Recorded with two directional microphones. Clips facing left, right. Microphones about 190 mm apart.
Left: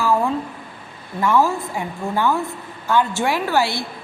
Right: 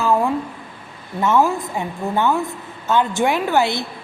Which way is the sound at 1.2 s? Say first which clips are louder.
Right 1 dB; 20° right (ahead or behind).